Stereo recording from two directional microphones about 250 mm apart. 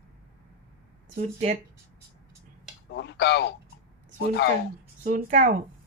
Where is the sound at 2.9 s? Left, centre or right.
Left.